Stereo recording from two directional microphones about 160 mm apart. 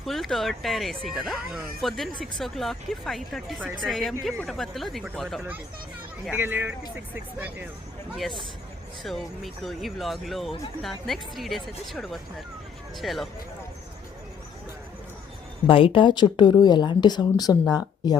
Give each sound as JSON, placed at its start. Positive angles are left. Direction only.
{"t": 0.0, "sound": "speech", "side_deg": 0}
{"t": 6.3, "sound": "speech", "side_deg": -15}
{"t": 8.1, "sound": "speech", "side_deg": 0}
{"t": 15.6, "sound": "speech", "side_deg": 35}